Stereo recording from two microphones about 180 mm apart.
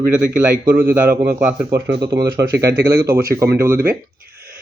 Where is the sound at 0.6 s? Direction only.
15° right (ahead or behind).